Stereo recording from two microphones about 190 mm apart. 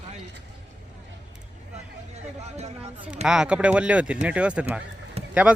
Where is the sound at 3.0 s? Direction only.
5° right (ahead or behind).